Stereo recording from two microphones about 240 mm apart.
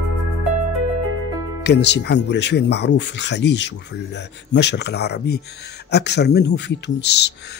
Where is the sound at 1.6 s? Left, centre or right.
Left.